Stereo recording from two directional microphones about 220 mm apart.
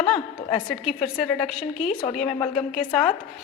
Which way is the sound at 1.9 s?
25° left (ahead or behind).